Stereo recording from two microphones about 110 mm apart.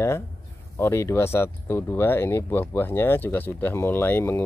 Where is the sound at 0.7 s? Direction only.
25° left (ahead or behind).